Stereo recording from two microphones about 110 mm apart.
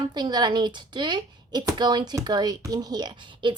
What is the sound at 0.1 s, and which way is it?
Speech, 40° right (ahead or behind).